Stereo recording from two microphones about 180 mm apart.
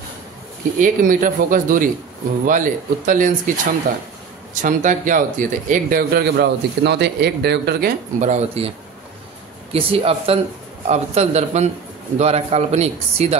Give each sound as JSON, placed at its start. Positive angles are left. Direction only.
{"t": 0.7, "sound": "speech", "side_deg": -45}
{"t": 4.6, "sound": "a man's voice", "side_deg": -45}
{"t": 8.2, "sound": "a man's voice", "side_deg": -40}